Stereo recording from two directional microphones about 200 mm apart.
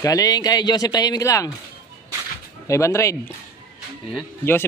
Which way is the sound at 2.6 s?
15° left (ahead or behind).